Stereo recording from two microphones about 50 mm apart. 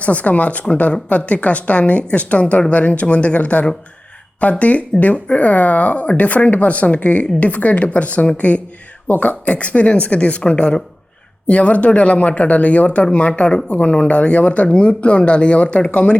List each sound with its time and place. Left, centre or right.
0.0 s speech: left